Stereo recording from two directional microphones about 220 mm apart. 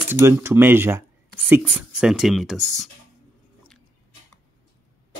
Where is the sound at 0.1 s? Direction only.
10° right (ahead or behind).